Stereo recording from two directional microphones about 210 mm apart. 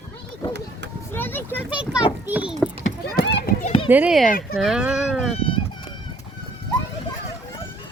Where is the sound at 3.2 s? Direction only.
55° left (ahead or behind).